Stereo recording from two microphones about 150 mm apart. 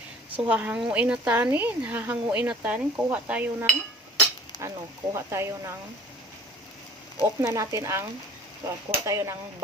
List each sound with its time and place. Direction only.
0.3 s a woman's voice: 10° right (ahead or behind)
4.5 s a sound: 30° left (ahead or behind)
5.1 s a woman's voice: 15° right (ahead or behind)
7.2 s speech: 20° right (ahead or behind)